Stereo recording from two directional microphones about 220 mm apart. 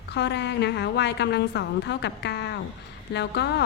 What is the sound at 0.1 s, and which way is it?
A woman's voice, 50° left (ahead or behind).